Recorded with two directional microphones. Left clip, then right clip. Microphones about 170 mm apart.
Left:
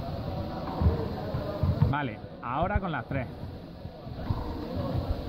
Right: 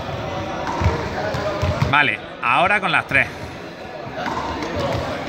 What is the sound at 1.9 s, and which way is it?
Speech, 5° left (ahead or behind).